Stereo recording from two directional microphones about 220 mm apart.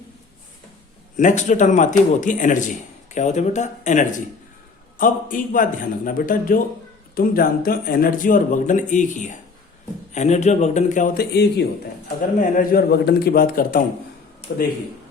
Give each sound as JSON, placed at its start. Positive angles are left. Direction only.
{"t": 1.1, "sound": "speech", "side_deg": 35}